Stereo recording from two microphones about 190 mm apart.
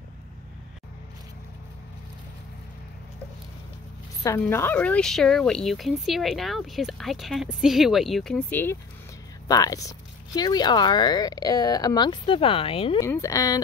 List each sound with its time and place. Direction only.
4.2 s speech: 15° left (ahead or behind); by 13.0 s 30° left (ahead or behind)
13.0 s speech: 15° left (ahead or behind)